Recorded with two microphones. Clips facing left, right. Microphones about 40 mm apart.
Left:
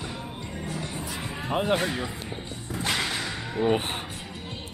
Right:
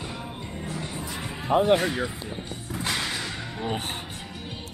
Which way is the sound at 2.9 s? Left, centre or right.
Centre.